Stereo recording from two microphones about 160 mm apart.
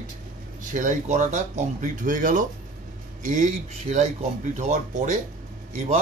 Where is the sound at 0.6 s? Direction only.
55° right (ahead or behind).